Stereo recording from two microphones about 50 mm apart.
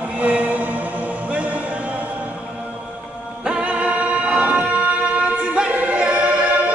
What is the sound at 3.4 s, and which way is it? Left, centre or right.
Music, right.